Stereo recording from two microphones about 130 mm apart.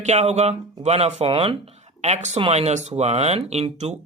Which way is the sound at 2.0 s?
60° right (ahead or behind).